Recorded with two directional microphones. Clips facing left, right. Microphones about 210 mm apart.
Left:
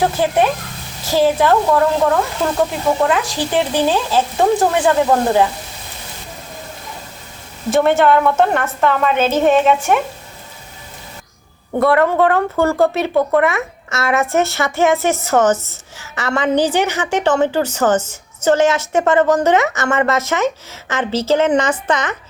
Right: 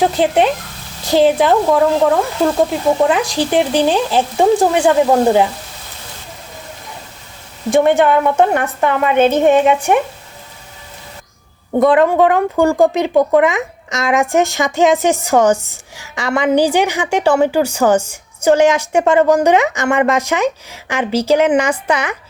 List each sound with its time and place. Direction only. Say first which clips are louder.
0.2 s speech: right 2 dB; 20° right (ahead or behind)
7.7 s speech: right 1 dB; 15° right (ahead or behind)
11.8 s speech: right 3 dB; 15° right (ahead or behind)